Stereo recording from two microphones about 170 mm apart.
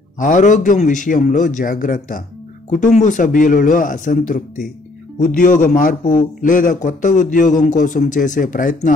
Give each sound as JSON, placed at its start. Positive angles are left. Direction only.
{"t": 0.2, "sound": "a man's voice", "side_deg": 50}